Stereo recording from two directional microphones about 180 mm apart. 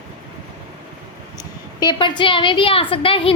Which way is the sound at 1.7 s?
25° left (ahead or behind).